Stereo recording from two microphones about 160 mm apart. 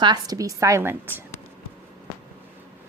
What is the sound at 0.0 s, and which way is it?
A woman's voice, 25° right (ahead or behind).